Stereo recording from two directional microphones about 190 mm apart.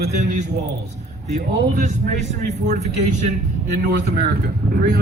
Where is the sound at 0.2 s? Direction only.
40° right (ahead or behind).